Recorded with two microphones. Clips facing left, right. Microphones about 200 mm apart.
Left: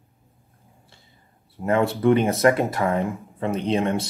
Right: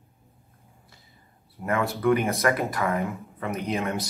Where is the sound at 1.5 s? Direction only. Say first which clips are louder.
Left 5 dB; 25° left (ahead or behind).